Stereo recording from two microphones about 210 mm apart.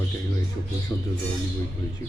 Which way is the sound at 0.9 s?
20° left (ahead or behind).